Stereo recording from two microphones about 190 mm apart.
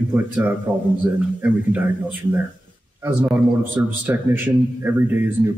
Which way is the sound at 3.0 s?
10° right (ahead or behind).